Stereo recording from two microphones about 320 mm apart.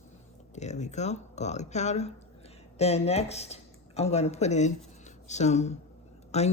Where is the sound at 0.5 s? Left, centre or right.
Left.